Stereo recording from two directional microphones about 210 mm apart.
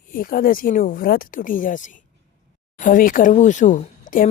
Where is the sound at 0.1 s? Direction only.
45° left (ahead or behind).